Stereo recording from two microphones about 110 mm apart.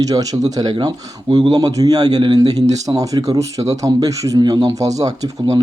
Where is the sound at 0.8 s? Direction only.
40° right (ahead or behind).